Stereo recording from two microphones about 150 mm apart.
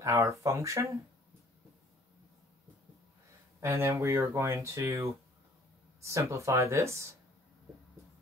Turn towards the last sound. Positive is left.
turn(degrees=-20)  # may be behind; listen again after turning